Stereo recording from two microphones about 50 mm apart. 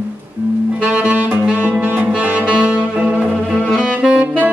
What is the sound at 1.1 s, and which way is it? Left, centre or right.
Saxophone, right.